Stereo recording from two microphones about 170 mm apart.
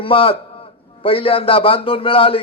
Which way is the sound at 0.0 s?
30° left (ahead or behind).